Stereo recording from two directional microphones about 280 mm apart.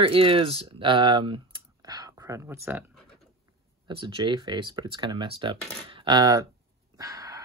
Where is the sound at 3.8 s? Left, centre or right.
Centre.